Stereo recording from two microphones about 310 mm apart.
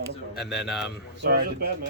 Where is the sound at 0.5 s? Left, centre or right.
Centre.